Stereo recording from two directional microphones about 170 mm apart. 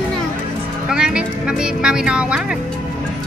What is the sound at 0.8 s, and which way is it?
Speech, 5° right (ahead or behind).